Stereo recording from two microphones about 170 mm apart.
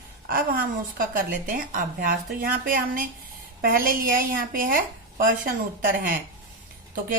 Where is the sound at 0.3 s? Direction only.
55° right (ahead or behind).